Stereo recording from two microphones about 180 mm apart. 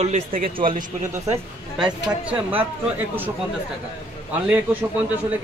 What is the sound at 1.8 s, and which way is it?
Speech, 5° right (ahead or behind).